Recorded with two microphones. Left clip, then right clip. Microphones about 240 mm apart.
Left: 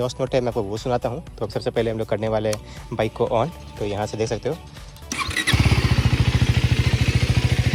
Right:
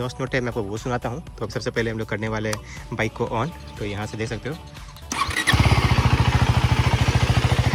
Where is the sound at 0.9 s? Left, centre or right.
Left.